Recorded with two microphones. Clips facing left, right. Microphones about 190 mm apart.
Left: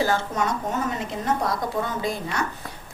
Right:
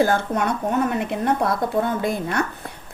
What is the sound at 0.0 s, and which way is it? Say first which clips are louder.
A woman's voice: right 4 dB; 55° right (ahead or behind).